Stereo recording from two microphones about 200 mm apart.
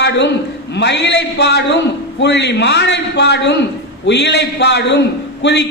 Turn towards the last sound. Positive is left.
turn(degrees=60)  # may be behind; listen again after turning